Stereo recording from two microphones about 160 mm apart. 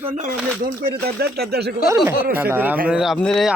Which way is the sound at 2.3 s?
15° right (ahead or behind).